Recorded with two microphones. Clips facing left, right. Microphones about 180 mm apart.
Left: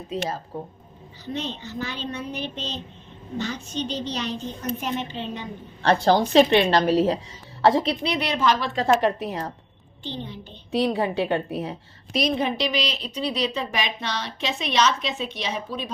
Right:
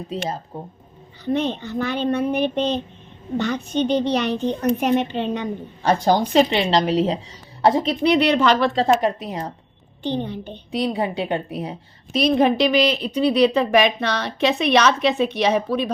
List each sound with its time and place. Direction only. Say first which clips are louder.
0.1 s speech: left 1 dB; 20° right (ahead or behind)
1.2 s a woman's voice: right 9 dB; 55° right (ahead or behind)
5.8 s a woman's voice: right 1 dB; 10° right (ahead or behind)
8.0 s a woman's voice: right 7 dB; 65° right (ahead or behind)
8.7 s speech: right 3 dB; 30° right (ahead or behind)
9.0 s a woman's voice: right 1 dB; 15° right (ahead or behind)
10.0 s a woman's voice: right 9 dB; 55° right (ahead or behind)
10.7 s a woman's voice: even; 15° right (ahead or behind)
12.2 s a woman's voice: right 8 dB; 55° right (ahead or behind)